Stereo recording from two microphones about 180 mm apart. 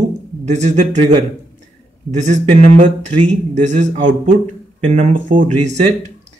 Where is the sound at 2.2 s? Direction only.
40° right (ahead or behind).